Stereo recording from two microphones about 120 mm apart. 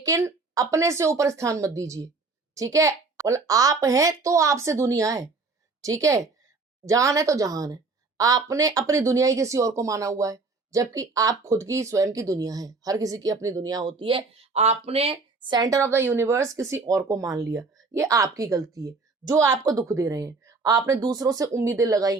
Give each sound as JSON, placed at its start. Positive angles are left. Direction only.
{"t": 0.0, "sound": "a woman's voice", "side_deg": -25}
{"t": 14.0, "sound": "a woman's voice", "side_deg": -45}